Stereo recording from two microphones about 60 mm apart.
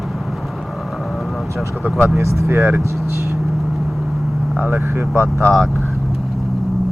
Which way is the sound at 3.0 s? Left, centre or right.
Right.